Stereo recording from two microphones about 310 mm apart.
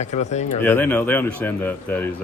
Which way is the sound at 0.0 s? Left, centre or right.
Left.